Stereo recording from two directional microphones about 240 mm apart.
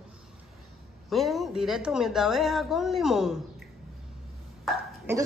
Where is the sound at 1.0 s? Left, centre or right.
Centre.